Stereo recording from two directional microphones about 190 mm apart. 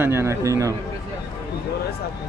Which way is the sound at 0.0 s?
15° right (ahead or behind).